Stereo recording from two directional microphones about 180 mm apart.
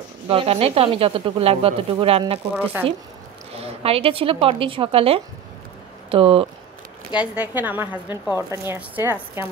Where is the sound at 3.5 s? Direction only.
35° right (ahead or behind).